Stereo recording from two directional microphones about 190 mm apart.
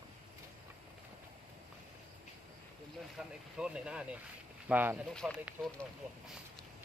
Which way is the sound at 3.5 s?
5° right (ahead or behind).